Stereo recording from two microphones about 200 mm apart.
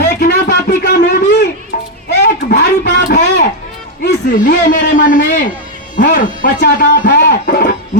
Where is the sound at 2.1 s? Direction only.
55° left (ahead or behind).